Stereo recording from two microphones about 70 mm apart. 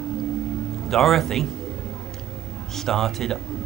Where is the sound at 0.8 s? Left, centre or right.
Centre.